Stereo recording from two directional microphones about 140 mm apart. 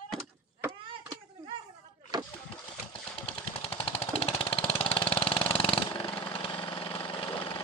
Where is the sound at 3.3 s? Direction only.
40° left (ahead or behind).